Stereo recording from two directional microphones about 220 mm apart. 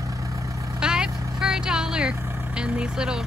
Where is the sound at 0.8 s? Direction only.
5° right (ahead or behind).